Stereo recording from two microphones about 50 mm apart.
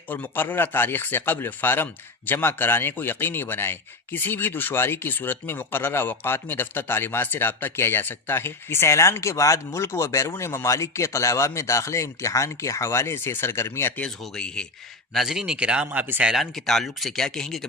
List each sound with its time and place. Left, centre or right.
0.1 s a man's voice: left
13.1 s speech: left
14.3 s speech: centre
15.1 s speech: centre
15.5 s speech: right
15.9 s a man's voice: right
16.3 s speech: centre